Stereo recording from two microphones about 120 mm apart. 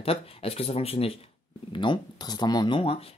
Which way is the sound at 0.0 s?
55° left (ahead or behind).